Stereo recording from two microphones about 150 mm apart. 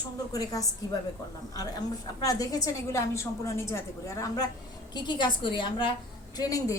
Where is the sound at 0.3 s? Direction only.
25° left (ahead or behind).